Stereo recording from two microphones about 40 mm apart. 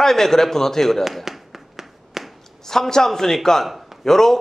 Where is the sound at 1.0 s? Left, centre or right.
Centre.